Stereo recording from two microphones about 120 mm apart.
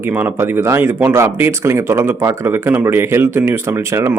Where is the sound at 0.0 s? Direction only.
15° right (ahead or behind).